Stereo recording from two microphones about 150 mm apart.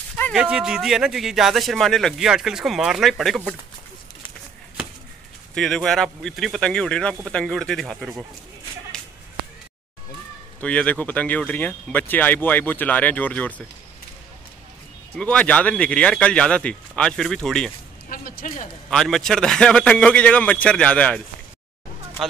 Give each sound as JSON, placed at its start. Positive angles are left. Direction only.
{"t": 0.3, "sound": "speech", "side_deg": -5}
{"t": 5.5, "sound": "speech", "side_deg": 5}
{"t": 10.6, "sound": "speech", "side_deg": 10}
{"t": 15.1, "sound": "speech", "side_deg": 10}
{"t": 18.1, "sound": "speech", "side_deg": 70}
{"t": 18.9, "sound": "speech", "side_deg": 5}